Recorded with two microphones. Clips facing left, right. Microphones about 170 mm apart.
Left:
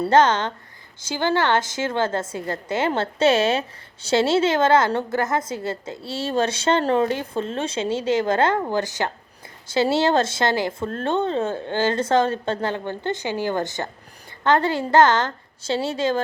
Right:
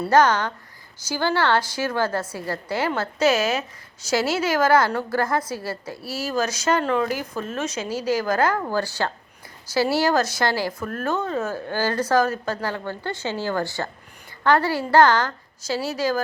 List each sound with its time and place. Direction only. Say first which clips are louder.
0.1 s a woman's voice: even; 25° left (ahead or behind)